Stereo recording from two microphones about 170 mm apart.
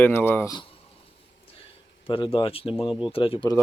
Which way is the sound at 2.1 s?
30° left (ahead or behind).